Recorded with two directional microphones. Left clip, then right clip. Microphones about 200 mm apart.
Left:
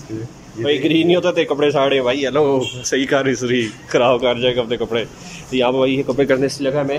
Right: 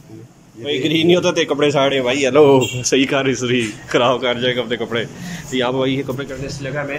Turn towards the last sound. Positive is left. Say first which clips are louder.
# left 5 dB
turn(degrees=20)  # may be behind; listen again after turning